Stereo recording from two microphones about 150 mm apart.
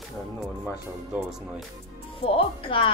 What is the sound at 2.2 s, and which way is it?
Speech, 40° left (ahead or behind).